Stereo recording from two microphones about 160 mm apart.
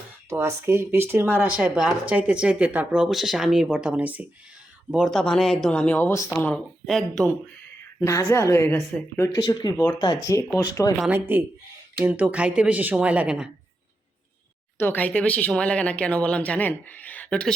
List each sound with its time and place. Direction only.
0.3 s speech: 15° right (ahead or behind)
5.1 s speech: 5° left (ahead or behind)
6.8 s speech: centre (ahead or behind)
7.9 s speech: 15° left (ahead or behind)
9.4 s speech: 30° left (ahead or behind)
11.1 s speech: 15° right (ahead or behind)
14.8 s speech: 10° left (ahead or behind)